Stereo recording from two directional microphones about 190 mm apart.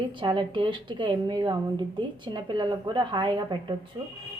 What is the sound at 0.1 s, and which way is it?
A woman's voice, 25° right (ahead or behind).